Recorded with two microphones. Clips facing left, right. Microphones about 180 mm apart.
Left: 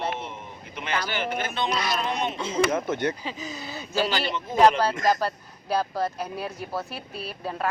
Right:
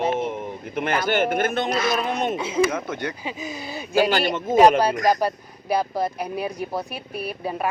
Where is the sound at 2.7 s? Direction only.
25° left (ahead or behind).